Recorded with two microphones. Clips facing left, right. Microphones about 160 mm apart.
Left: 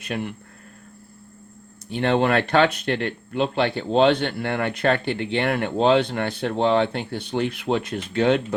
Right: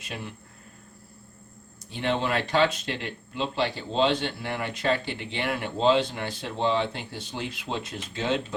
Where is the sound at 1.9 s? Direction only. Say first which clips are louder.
Left 7 dB; 65° left (ahead or behind).